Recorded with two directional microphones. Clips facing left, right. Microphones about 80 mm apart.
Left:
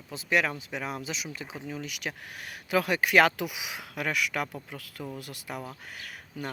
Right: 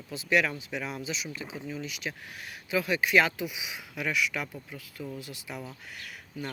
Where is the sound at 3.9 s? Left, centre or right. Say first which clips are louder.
Even; left.